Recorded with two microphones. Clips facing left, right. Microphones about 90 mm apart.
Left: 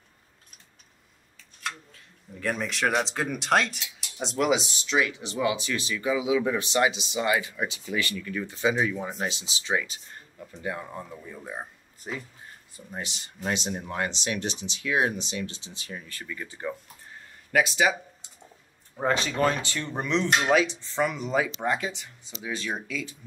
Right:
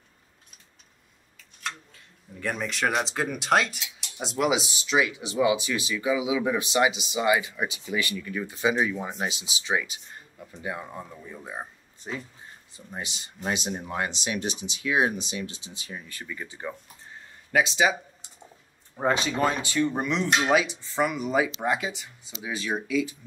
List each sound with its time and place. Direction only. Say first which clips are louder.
2.4 s speech: even; centre (ahead or behind); by 10.9 s 15° right (ahead or behind)
10.9 s speech: even; centre (ahead or behind); by 17.9 s 20° right (ahead or behind)
18.9 s speech: right 1 dB; 15° right (ahead or behind)